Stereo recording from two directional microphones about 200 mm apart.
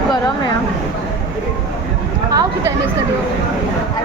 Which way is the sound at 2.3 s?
20° right (ahead or behind).